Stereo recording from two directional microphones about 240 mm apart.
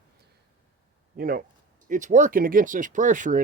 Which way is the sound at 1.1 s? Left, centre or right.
Right.